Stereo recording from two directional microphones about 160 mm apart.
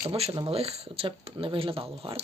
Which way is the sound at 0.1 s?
30° right (ahead or behind).